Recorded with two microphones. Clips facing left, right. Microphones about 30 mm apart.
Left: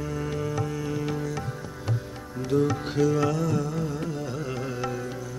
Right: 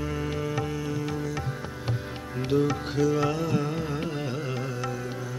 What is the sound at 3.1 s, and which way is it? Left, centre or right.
Carnatic music, centre.